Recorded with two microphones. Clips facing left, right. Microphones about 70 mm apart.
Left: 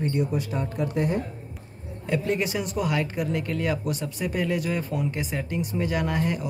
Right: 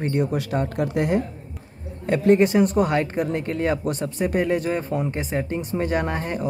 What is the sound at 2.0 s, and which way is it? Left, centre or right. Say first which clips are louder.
Speech: right 9 dB; right.